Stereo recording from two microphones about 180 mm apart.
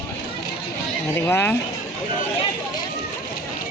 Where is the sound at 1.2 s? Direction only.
10° left (ahead or behind).